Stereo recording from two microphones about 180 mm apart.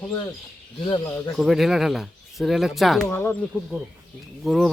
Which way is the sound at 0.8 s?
25° left (ahead or behind).